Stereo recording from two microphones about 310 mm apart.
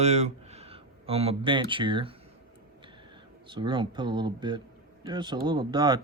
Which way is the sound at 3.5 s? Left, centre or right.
Centre.